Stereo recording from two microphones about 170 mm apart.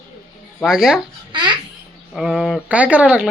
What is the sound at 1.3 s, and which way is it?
Babbling, 25° right (ahead or behind).